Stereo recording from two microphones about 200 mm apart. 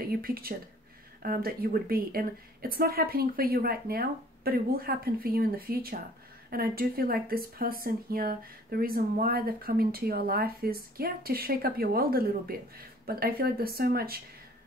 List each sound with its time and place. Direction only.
0.2 s speech: 45° right (ahead or behind)